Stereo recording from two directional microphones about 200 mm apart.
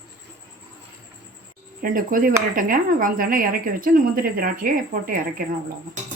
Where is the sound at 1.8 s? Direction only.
45° right (ahead or behind).